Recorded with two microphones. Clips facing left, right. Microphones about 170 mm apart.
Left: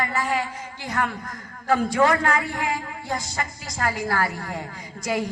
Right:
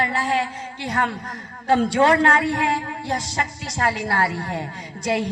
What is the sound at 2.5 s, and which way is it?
Child singing, 30° right (ahead or behind).